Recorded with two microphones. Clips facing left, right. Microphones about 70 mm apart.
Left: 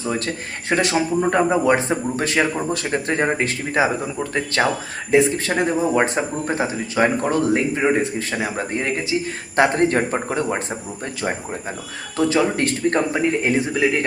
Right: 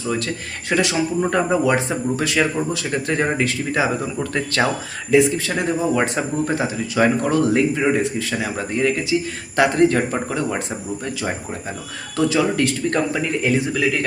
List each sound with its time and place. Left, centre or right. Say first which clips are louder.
0.0 s speech: even; left
1.3 s speech: left 2 dB; left
4.0 s speech: even; left
5.1 s speech: even; left